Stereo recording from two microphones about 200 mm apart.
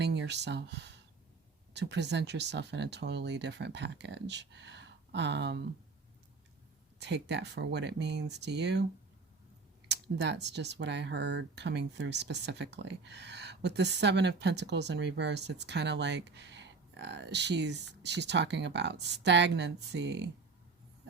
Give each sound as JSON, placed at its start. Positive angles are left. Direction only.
{"t": 0.0, "sound": "speech", "side_deg": -60}
{"t": 7.0, "sound": "speech", "side_deg": -60}
{"t": 9.9, "sound": "speech", "side_deg": -60}